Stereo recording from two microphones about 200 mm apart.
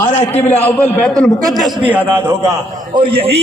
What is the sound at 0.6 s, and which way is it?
Speech, 10° left (ahead or behind).